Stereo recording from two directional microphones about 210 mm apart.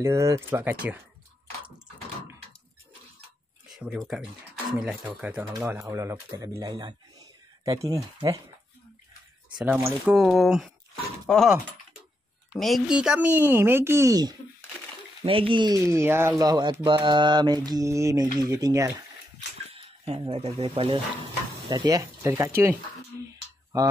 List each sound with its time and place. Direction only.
0.0 s speech: 15° right (ahead or behind)
3.6 s speech: centre (ahead or behind)
9.6 s speech: 5° right (ahead or behind)
19.7 s speech: 25° right (ahead or behind)
23.1 s a sound: 10° right (ahead or behind)